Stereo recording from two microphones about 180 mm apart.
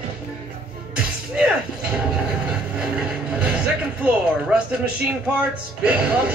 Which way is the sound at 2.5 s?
5° right (ahead or behind).